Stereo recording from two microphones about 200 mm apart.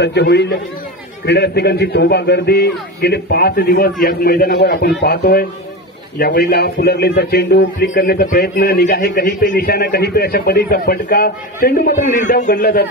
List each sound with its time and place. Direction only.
0.0 s a man's voice: 55° left (ahead or behind); by 12.6 s 40° left (ahead or behind)